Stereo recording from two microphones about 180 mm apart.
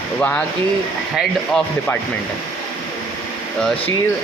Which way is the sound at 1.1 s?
5° left (ahead or behind).